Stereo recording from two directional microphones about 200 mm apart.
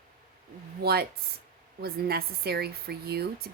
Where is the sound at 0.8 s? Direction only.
50° right (ahead or behind).